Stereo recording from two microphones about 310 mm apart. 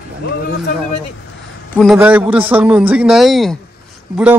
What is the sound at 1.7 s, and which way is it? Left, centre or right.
A man's voice, centre.